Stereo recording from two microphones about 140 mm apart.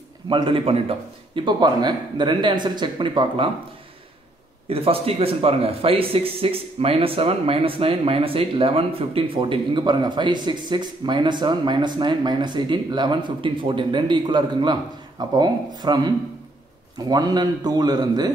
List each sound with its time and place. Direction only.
0.3 s speech: 35° right (ahead or behind)
4.6 s a man's voice: 45° right (ahead or behind)